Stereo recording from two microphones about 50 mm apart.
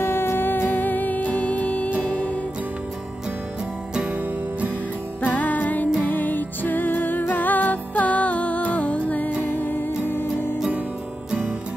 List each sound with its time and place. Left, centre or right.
0.0 s music: left
5.2 s music: left